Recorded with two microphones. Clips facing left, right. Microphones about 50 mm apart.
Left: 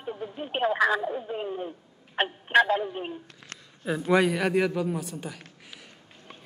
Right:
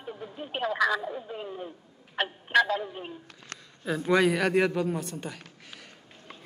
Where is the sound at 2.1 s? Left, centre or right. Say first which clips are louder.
Left 2 dB; left.